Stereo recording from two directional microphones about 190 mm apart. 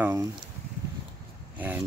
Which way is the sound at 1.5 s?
10° right (ahead or behind).